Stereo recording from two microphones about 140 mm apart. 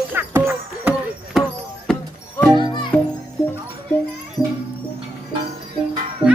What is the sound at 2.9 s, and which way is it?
Music, 15° left (ahead or behind).